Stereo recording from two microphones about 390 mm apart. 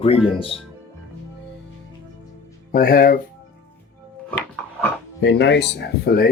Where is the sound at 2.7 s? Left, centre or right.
Left.